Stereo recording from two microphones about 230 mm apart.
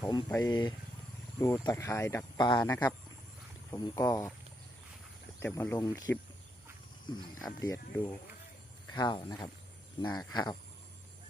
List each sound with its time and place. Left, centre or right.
0.0 s speech: centre
5.4 s speech: centre
7.6 s speech: centre